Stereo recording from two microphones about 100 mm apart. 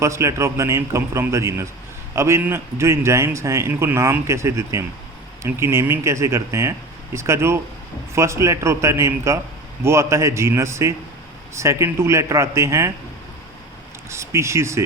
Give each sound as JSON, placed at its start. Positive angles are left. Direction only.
{"t": 0.0, "sound": "a man's voice", "side_deg": -30}
{"t": 14.1, "sound": "speech", "side_deg": -30}